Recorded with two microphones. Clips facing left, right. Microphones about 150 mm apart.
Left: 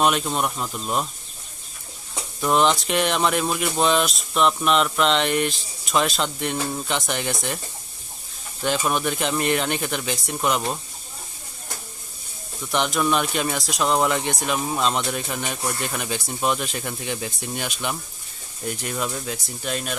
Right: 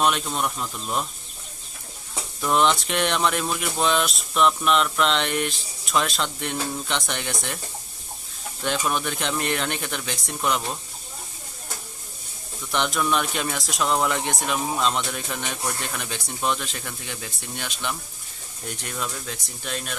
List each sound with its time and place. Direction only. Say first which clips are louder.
0.3 s speech: left 2 dB; 15° left (ahead or behind)
2.4 s speech: left 2 dB; centre (ahead or behind)
8.6 s speech: left 3 dB; 5° left (ahead or behind)
12.7 s speech: left 2 dB; centre (ahead or behind)